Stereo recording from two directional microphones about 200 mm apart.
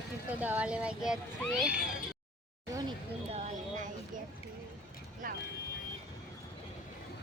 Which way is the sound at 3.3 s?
35° right (ahead or behind).